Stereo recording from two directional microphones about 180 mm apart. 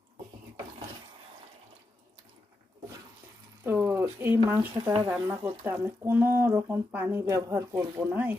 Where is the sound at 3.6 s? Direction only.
15° right (ahead or behind).